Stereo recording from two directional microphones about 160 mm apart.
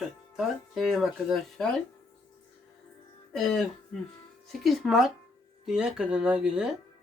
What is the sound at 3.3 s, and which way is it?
Speech, centre (ahead or behind).